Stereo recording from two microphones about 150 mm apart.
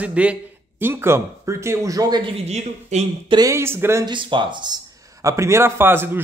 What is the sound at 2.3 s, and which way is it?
Speech, 45° right (ahead or behind).